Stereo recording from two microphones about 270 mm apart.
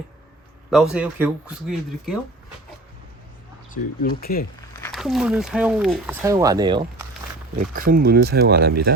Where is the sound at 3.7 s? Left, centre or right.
Left.